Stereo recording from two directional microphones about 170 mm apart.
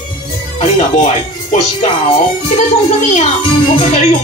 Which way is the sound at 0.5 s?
40° left (ahead or behind).